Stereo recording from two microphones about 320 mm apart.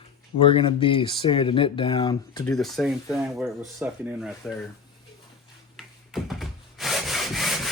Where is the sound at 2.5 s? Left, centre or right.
Centre.